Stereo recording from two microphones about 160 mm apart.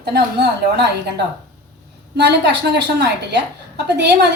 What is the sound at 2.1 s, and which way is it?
A woman's voice, 90° right.